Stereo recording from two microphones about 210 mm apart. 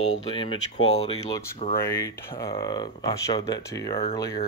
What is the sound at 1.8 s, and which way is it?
Speech, 15° left (ahead or behind).